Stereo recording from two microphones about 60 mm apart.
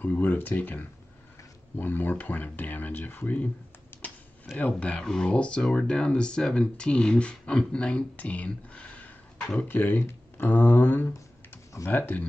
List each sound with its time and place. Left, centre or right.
0.0 s speech: left
3.9 s a sound: left
4.6 s speech: left